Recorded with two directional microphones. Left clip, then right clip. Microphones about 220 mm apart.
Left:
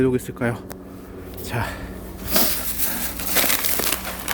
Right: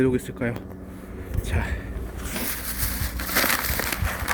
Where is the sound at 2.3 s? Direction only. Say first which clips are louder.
Left 10 dB; 45° left (ahead or behind).